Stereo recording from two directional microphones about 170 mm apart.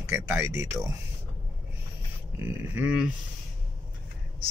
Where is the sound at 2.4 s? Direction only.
10° right (ahead or behind).